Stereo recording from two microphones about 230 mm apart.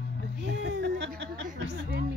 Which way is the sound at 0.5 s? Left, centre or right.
Right.